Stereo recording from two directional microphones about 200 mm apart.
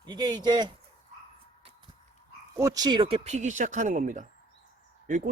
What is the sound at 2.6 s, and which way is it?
A man's voice, 15° right (ahead or behind).